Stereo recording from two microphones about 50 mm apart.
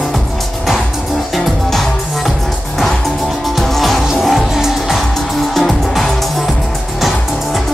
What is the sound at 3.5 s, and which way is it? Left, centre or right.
Music, centre.